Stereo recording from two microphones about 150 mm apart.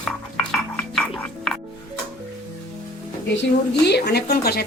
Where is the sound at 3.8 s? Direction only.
90° left.